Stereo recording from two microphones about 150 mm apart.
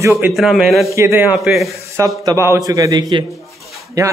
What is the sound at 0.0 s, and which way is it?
Speech, 15° right (ahead or behind).